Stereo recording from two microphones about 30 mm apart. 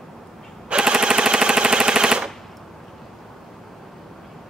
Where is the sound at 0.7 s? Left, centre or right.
Right.